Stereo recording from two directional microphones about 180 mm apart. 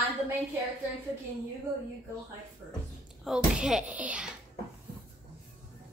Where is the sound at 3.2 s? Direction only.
5° right (ahead or behind).